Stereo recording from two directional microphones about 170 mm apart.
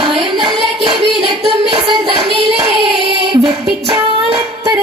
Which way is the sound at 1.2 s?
30° right (ahead or behind).